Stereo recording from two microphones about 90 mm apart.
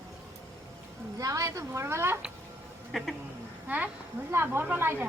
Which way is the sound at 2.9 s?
Centre (ahead or behind).